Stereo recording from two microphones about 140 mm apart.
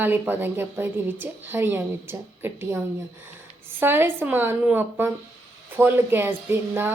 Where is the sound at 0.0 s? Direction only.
15° right (ahead or behind).